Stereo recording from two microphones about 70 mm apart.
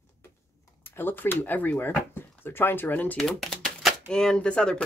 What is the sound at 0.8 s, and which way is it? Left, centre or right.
Speech, left.